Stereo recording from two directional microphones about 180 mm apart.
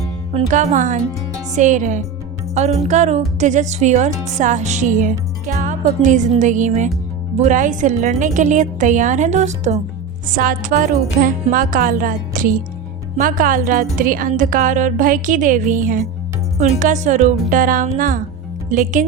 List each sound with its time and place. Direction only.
0.3 s speech: 40° right (ahead or behind)